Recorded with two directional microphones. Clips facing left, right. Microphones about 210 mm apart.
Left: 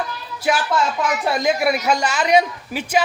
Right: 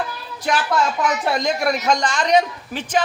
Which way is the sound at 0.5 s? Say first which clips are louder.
Left 1 dB; 10° left (ahead or behind).